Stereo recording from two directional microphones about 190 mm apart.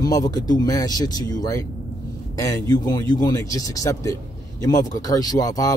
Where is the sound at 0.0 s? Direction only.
20° left (ahead or behind).